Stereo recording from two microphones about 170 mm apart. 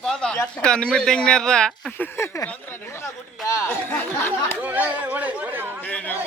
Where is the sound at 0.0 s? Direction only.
5° left (ahead or behind).